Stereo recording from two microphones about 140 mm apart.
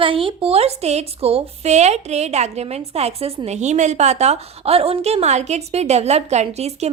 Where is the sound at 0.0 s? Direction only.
40° right (ahead or behind).